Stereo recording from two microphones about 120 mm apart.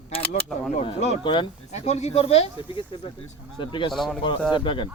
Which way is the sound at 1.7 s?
65° left (ahead or behind).